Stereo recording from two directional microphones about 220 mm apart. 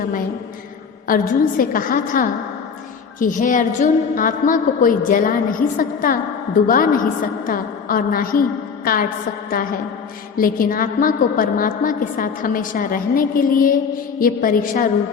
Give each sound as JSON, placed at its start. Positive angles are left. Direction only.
{"t": 1.0, "sound": "a woman's voice", "side_deg": 40}
{"t": 10.3, "sound": "a woman's voice", "side_deg": 40}